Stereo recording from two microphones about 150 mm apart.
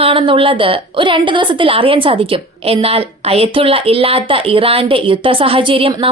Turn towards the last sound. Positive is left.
turn(degrees=-35)  # may be behind; listen again after turning